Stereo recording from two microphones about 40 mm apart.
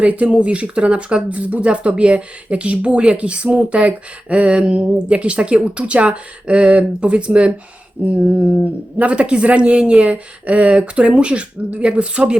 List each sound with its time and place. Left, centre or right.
0.0 s speech: right